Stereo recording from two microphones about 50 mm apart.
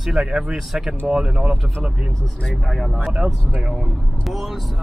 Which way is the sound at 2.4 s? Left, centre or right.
Centre.